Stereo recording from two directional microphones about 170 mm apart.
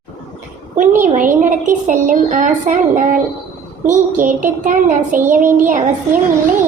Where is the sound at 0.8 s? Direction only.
50° right (ahead or behind).